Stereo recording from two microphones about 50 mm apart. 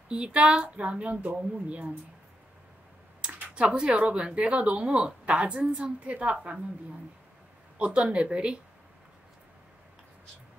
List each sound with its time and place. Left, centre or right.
0.1 s speech: centre
3.3 s speech: right
7.8 s speech: right